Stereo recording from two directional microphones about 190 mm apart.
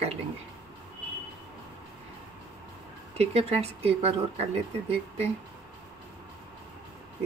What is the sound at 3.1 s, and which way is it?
Speech, 35° right (ahead or behind).